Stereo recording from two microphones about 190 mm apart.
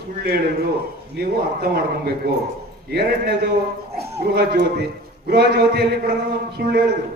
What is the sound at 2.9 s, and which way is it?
A man's voice, 60° right (ahead or behind).